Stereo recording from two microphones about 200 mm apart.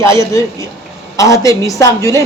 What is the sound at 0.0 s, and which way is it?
A man's voice, 15° left (ahead or behind).